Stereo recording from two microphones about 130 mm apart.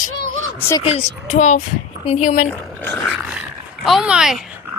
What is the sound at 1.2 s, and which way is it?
Speech, 65° left (ahead or behind).